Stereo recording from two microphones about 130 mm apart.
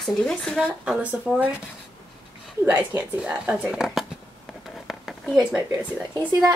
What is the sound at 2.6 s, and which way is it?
Speech, 15° right (ahead or behind).